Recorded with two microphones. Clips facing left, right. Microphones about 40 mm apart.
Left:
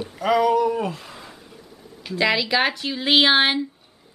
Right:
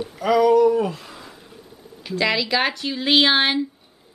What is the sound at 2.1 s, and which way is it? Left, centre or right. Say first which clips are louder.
Speech: left 1 dB; centre.